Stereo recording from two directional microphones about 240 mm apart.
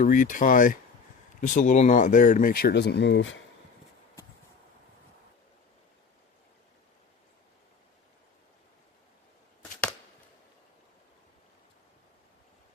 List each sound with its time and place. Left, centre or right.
0.0 s speech: left